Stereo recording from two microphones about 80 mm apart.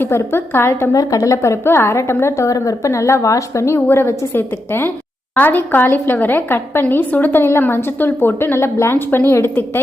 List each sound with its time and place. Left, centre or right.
0.0 s a woman's voice: left
0.9 s a woman's voice: left
3.8 s a woman's voice: left